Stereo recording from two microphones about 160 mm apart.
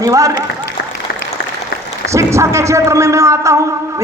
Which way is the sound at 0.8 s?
90° left.